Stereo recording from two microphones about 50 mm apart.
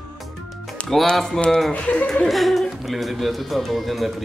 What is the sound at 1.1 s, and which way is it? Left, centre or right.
Speech, centre.